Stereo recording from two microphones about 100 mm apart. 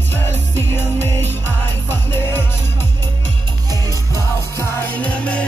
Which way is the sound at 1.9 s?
20° left (ahead or behind).